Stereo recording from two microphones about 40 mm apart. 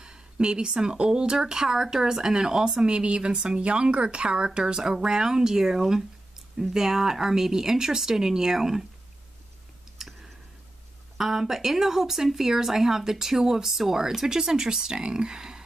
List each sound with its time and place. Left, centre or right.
0.0 s speech: right
2.9 s speech: right
10.0 s clicking: centre
11.1 s speech: centre